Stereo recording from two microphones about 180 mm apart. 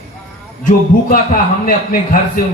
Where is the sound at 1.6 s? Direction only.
50° left (ahead or behind).